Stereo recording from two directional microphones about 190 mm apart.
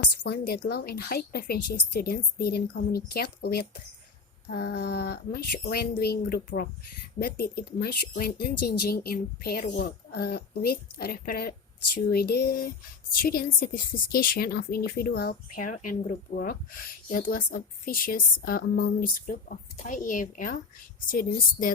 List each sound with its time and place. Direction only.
0.2 s a woman's voice: 55° left (ahead or behind)